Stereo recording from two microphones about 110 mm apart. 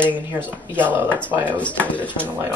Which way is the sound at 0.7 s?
20° right (ahead or behind).